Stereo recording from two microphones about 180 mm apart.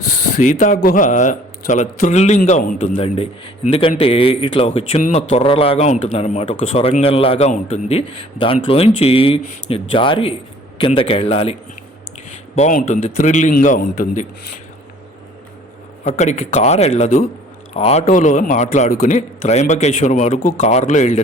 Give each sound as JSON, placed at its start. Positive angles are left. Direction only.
{"t": 0.0, "sound": "speech", "side_deg": 50}
{"t": 2.9, "sound": "a man's voice", "side_deg": 35}
{"t": 12.5, "sound": "speech", "side_deg": 45}
{"t": 16.0, "sound": "a man's voice", "side_deg": 40}